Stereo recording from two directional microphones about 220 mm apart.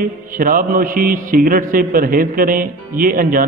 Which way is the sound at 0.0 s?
40° right (ahead or behind).